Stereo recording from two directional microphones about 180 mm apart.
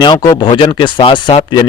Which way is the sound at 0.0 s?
25° left (ahead or behind).